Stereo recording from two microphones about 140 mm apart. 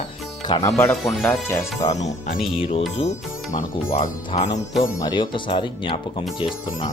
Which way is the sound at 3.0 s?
45° left (ahead or behind).